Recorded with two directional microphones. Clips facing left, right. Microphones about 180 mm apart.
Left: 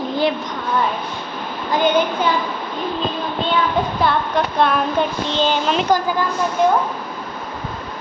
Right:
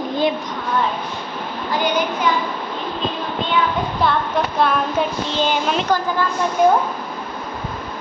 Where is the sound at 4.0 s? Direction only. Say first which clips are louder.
Right 2 dB; centre (ahead or behind).